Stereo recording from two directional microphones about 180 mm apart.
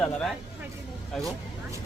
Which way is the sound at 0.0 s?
5° left (ahead or behind).